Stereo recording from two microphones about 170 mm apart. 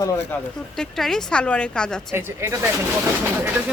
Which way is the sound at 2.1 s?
15° right (ahead or behind).